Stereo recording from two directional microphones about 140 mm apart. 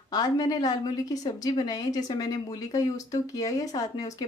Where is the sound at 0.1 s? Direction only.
30° left (ahead or behind).